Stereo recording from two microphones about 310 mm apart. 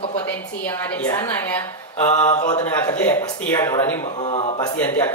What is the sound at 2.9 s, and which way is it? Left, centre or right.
Speech, centre.